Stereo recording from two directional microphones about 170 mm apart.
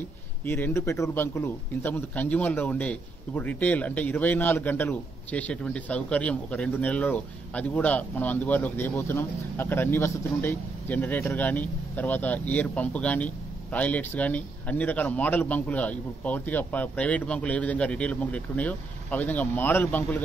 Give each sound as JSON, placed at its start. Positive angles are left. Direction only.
{"t": 0.5, "sound": "speech", "side_deg": 15}